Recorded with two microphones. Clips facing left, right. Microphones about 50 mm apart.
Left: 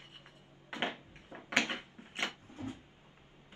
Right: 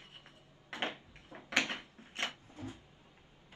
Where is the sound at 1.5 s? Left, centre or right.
Left.